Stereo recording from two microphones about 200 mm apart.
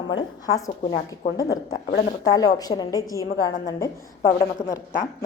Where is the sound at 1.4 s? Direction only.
20° left (ahead or behind).